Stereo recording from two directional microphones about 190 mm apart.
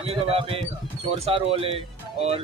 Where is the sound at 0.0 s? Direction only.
30° right (ahead or behind).